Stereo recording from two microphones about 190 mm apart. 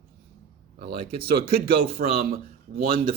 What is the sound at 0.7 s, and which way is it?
A man's voice, 55° right (ahead or behind).